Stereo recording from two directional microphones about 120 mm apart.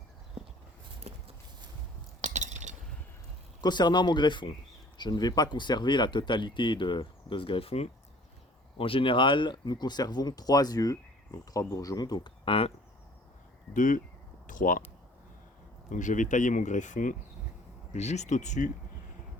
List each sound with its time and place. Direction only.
2.2 s chink: 80° right
3.6 s speech: 35° left (ahead or behind)
12.5 s speech: 55° left (ahead or behind)
15.9 s speech: 90° left
17.9 s speech: 70° left (ahead or behind); by 18.7 s 85° left